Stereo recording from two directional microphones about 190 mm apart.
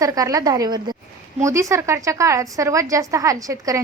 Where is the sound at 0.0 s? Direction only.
20° right (ahead or behind).